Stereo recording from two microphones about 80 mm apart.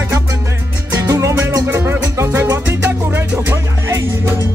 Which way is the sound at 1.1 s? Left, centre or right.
Right.